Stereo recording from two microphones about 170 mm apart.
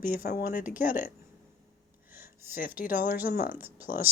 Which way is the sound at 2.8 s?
55° left (ahead or behind).